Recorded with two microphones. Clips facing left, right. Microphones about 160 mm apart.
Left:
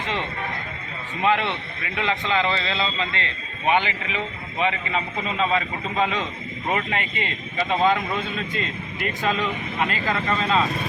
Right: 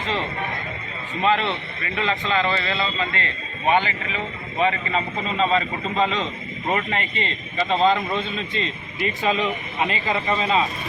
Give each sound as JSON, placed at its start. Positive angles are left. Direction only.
{"t": 1.2, "sound": "a man's voice", "side_deg": 10}
{"t": 4.9, "sound": "a man's voice", "side_deg": 5}
{"t": 9.8, "sound": "speech", "side_deg": -10}